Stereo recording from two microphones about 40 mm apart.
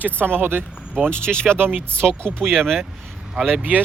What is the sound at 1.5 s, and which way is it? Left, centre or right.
Speech, right.